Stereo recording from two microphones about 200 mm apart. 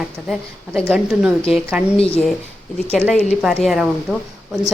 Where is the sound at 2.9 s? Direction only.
5° right (ahead or behind).